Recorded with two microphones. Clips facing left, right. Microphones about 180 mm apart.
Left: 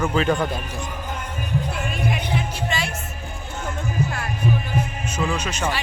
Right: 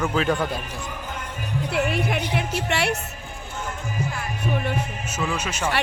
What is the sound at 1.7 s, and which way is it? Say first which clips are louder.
Music: right 3 dB; 65° right (ahead or behind).